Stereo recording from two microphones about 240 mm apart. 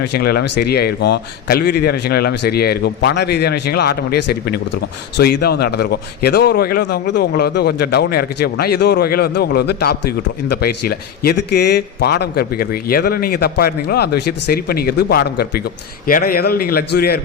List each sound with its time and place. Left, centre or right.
0.0 s a man's voice: left